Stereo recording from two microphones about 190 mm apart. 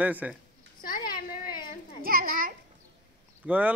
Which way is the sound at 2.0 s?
50° right (ahead or behind).